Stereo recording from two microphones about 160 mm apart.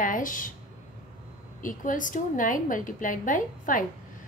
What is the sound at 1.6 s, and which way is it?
A woman's voice, 55° left (ahead or behind).